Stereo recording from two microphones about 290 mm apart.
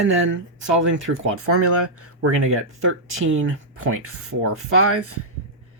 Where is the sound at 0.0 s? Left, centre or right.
Right.